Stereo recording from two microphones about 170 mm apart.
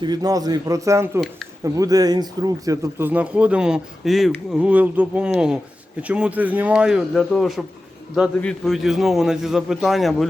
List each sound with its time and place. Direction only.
0.0 s a man's voice: 25° right (ahead or behind); by 10.2 s centre (ahead or behind)